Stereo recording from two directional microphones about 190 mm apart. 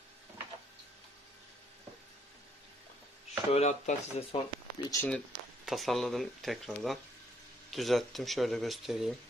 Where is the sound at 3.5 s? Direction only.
35° left (ahead or behind).